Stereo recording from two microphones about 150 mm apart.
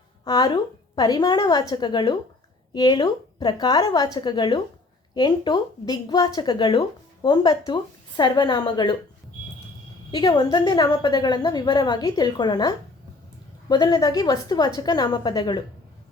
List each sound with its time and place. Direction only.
0.3 s speech: 25° left (ahead or behind)
10.1 s speech: 30° left (ahead or behind)